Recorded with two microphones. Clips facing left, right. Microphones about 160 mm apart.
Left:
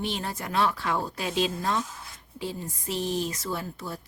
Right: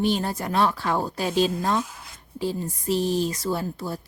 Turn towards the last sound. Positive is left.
turn(degrees=-35)  # may be behind; listen again after turning